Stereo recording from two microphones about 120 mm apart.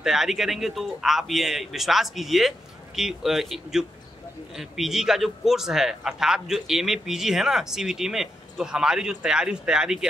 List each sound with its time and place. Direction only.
0.0 s a man's voice: 5° right (ahead or behind)